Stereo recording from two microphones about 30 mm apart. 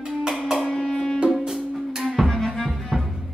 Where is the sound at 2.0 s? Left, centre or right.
Centre.